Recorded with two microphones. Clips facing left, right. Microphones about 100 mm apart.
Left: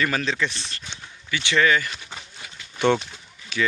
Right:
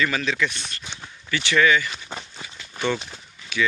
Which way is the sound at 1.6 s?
40° left (ahead or behind).